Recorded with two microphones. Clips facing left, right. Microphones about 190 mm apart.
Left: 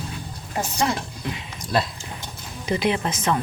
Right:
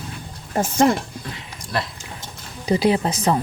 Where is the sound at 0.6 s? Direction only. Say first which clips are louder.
Right 7 dB; 50° right (ahead or behind).